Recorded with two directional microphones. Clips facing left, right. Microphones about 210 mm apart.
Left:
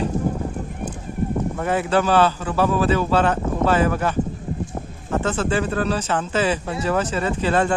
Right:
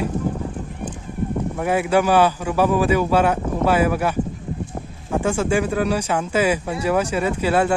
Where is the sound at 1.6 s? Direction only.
10° right (ahead or behind).